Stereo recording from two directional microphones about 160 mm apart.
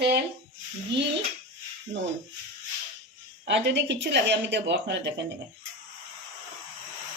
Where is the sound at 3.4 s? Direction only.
90° right.